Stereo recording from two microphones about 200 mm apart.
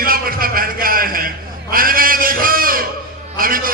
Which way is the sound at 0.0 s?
45° right (ahead or behind).